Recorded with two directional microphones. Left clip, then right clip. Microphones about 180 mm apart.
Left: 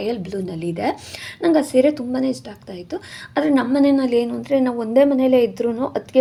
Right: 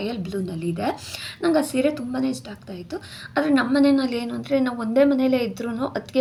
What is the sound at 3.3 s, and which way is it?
A woman's voice, 15° left (ahead or behind).